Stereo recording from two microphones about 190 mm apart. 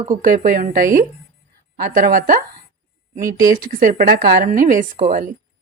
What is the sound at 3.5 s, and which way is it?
Speech, 45° right (ahead or behind).